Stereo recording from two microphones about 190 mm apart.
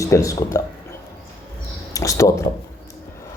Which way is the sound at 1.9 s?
15° left (ahead or behind).